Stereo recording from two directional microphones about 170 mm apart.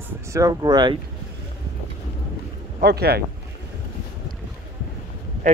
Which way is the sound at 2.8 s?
70° right (ahead or behind).